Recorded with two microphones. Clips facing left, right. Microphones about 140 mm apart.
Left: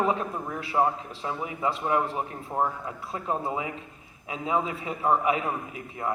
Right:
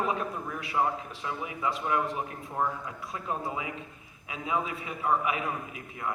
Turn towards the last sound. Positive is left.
turn(degrees=30)  # may be behind; listen again after turning